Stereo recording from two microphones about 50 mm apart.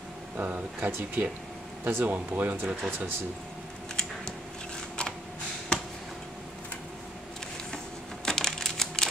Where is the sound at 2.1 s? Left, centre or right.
Right.